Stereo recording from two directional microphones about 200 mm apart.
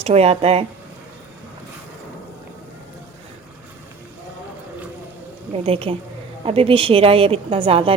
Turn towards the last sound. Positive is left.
turn(degrees=-25)  # may be behind; listen again after turning